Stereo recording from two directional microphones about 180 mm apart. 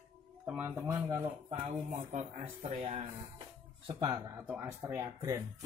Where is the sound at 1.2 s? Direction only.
35° right (ahead or behind).